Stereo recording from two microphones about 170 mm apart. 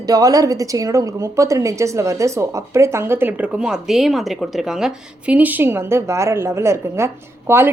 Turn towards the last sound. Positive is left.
turn(degrees=-15)  # may be behind; listen again after turning